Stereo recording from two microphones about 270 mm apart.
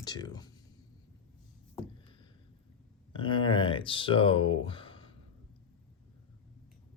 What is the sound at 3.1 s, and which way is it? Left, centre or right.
Speech, centre.